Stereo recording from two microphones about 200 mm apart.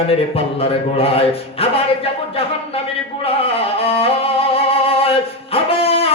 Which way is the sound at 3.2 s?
30° left (ahead or behind).